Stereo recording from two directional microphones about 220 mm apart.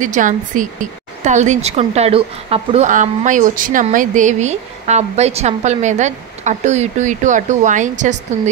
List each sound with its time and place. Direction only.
0.0 s a woman's voice: 35° right (ahead or behind)